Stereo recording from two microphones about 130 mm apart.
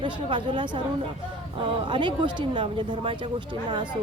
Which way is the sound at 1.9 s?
40° right (ahead or behind).